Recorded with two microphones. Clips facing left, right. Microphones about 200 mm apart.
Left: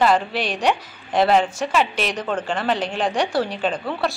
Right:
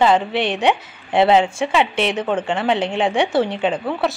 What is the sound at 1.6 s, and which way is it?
Speech, 25° right (ahead or behind).